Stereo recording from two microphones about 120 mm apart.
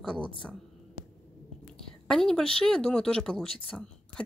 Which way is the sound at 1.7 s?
5° left (ahead or behind).